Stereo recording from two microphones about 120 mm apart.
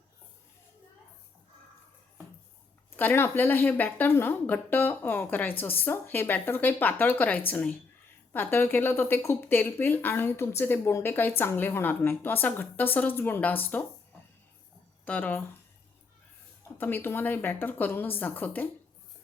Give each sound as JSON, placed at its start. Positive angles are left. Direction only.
{"t": 2.9, "sound": "speech", "side_deg": 15}
{"t": 15.0, "sound": "speech", "side_deg": 15}
{"t": 16.7, "sound": "speech", "side_deg": 15}